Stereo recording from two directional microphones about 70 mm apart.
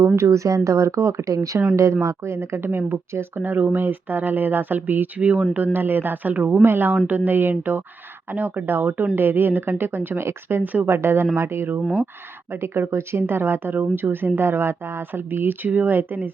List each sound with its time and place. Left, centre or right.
0.0 s speech: right
10.8 s speech: right